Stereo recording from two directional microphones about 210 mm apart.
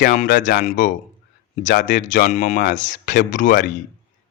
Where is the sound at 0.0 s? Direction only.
40° left (ahead or behind).